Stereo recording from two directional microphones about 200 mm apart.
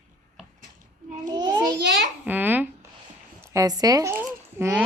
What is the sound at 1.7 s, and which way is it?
Speech, 60° right (ahead or behind).